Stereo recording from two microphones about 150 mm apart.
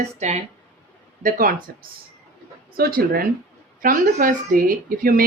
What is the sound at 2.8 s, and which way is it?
Speech, 80° right.